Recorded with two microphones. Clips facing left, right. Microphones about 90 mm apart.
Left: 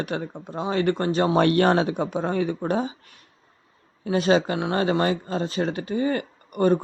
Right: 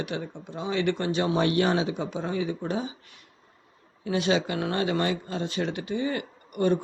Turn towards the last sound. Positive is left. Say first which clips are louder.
# left 4 dB
turn(degrees=40)  # may be behind; listen again after turning